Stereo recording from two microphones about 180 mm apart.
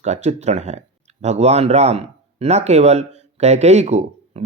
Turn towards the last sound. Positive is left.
turn(degrees=-40)  # may be behind; listen again after turning